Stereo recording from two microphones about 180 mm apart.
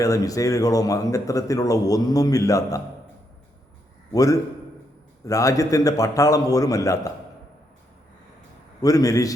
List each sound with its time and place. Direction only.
0.0 s a man's voice: 20° left (ahead or behind)
4.1 s a man's voice: 20° left (ahead or behind)
8.8 s a man's voice: 20° left (ahead or behind)